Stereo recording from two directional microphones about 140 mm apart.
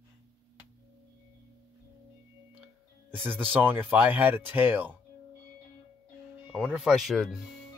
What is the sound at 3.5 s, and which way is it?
Speech, 15° right (ahead or behind).